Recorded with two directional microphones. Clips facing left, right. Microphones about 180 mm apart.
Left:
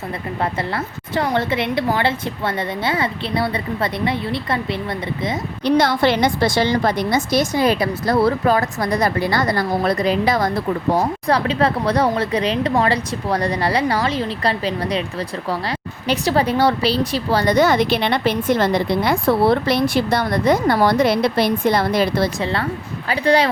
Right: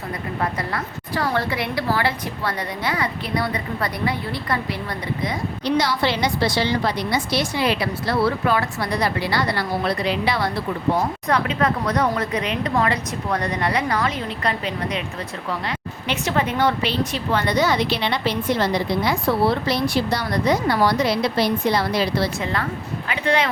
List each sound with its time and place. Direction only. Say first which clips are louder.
0.7 s a woman's voice: left 3 dB; 20° left (ahead or behind)
5.6 s a woman's voice: left 5 dB; 55° left (ahead or behind)
10.9 s a woman's voice: left 5 dB; 35° left (ahead or behind)
16.0 s a woman's voice: left 5 dB; 35° left (ahead or behind); by 22.3 s 50° left (ahead or behind)
22.4 s a woman's voice: left 3 dB; 30° left (ahead or behind)